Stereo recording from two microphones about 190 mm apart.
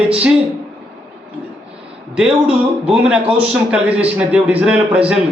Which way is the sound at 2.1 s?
5° right (ahead or behind).